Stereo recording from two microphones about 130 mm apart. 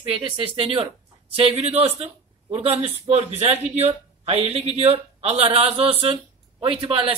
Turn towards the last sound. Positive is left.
turn(degrees=-45)  # may be behind; listen again after turning